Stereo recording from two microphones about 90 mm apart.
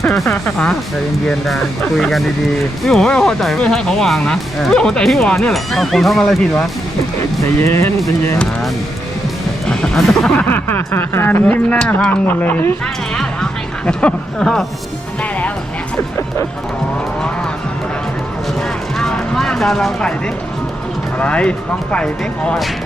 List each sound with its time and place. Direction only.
0.0 s music: 5° left (ahead or behind)
0.5 s speech: 5° left (ahead or behind)
7.4 s speech: 30° left (ahead or behind)
9.6 s speech: 5° left (ahead or behind)
10.5 s speech: 20° left (ahead or behind)
12.8 s speech: 10° left (ahead or behind)
15.2 s music: 15° left (ahead or behind)
18.9 s a sound: 5° left (ahead or behind)
21.2 s speech: 10° left (ahead or behind)